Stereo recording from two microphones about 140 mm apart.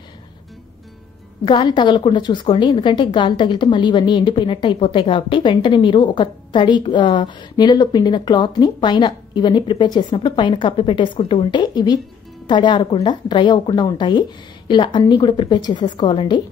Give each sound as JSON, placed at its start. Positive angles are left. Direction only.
{"t": 1.4, "sound": "a woman's voice", "side_deg": 35}